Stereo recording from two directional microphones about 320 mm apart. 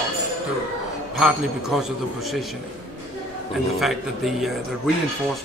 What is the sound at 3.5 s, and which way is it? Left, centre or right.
A man's voice, centre.